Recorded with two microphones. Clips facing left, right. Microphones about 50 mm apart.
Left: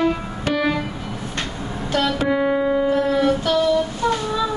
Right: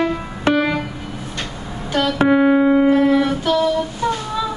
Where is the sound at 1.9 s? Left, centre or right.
Right.